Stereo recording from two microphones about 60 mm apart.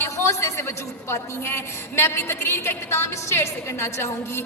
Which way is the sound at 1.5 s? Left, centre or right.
Left.